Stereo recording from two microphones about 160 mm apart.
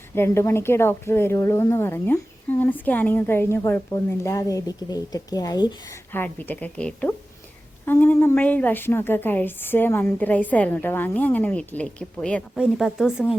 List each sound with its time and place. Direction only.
0.1 s speech: 15° left (ahead or behind)
6.1 s a woman's voice: 15° left (ahead or behind); by 13.2 s 5° right (ahead or behind)